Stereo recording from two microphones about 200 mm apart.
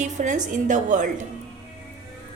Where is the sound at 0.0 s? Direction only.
40° right (ahead or behind).